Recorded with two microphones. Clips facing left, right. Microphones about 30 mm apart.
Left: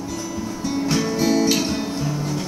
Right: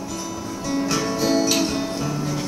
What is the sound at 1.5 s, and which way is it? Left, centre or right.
Music, centre.